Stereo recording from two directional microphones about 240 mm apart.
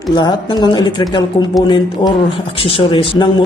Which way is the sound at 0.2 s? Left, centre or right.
Centre.